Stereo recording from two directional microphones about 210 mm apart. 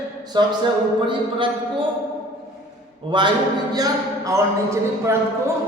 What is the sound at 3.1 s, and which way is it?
Speech, 25° right (ahead or behind).